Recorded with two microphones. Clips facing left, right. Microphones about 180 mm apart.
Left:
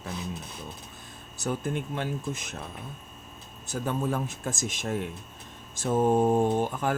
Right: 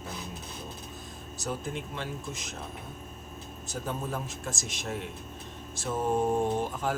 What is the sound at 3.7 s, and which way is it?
Speech, 65° left (ahead or behind).